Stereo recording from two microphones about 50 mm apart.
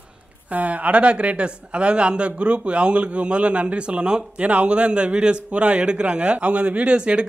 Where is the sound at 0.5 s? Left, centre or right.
Right.